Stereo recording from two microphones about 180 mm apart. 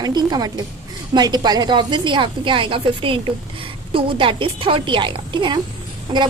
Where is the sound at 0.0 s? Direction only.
25° right (ahead or behind).